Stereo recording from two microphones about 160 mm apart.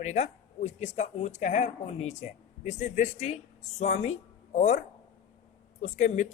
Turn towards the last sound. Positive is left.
turn(degrees=50)  # may be behind; listen again after turning